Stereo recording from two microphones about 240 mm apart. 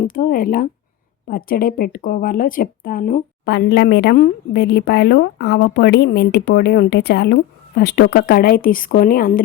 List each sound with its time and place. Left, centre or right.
0.0 s speech: left